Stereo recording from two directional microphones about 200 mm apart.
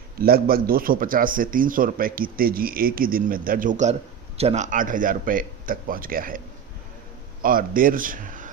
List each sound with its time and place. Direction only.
0.2 s speech: 50° right (ahead or behind)
7.4 s speech: 45° right (ahead or behind)